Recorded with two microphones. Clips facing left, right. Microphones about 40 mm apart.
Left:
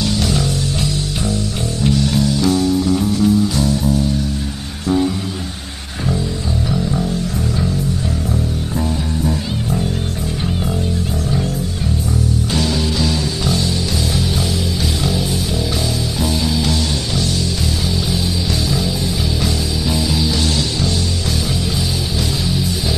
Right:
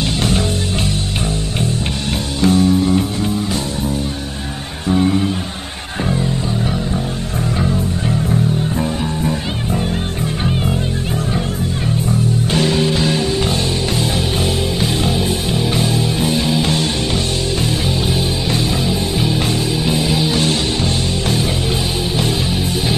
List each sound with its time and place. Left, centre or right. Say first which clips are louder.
2.1 s music: even; right
4.8 s music: right 1 dB; right
8.7 s music: right 1 dB; right
12.5 s music: right 4 dB; right
16.2 s music: even; right
19.9 s music: right 1 dB; right